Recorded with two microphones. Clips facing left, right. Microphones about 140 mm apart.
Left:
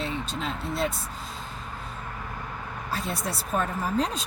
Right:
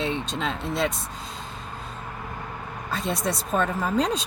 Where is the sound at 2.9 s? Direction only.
90° right.